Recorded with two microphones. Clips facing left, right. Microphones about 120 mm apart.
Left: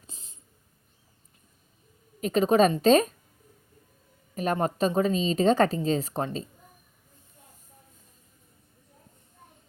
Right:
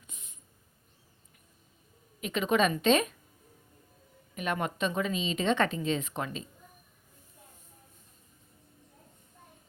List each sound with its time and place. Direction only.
0.1 s a sound: 30° left (ahead or behind)
2.2 s a woman's voice: 35° left (ahead or behind)
4.4 s a woman's voice: 35° left (ahead or behind)